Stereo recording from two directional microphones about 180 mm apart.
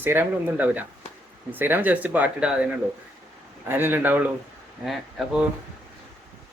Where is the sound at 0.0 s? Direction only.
10° right (ahead or behind).